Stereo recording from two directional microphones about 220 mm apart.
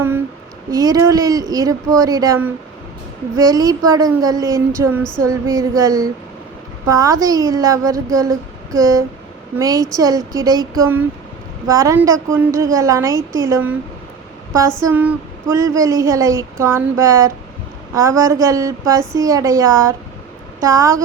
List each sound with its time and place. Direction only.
0.7 s speech: 15° right (ahead or behind)
14.8 s speech: 10° right (ahead or behind)